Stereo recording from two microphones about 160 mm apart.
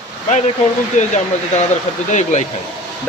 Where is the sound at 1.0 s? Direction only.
50° left (ahead or behind).